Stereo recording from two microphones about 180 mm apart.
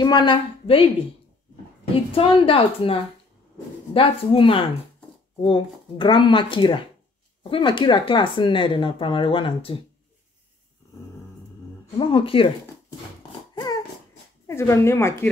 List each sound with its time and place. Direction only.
0.0 s speech: 25° left (ahead or behind)
2.1 s a woman's voice: 30° left (ahead or behind)
12.0 s speech: 30° left (ahead or behind)
14.5 s speech: 15° left (ahead or behind)